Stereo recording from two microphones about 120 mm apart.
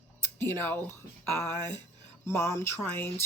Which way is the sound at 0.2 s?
20° left (ahead or behind).